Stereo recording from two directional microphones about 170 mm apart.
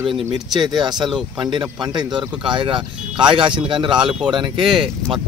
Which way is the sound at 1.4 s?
30° right (ahead or behind).